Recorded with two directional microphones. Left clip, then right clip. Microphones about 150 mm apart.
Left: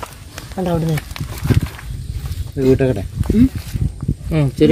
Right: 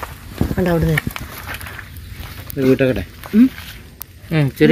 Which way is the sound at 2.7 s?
65° left (ahead or behind).